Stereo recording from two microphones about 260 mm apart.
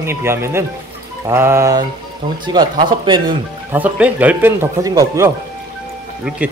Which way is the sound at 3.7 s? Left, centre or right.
Centre.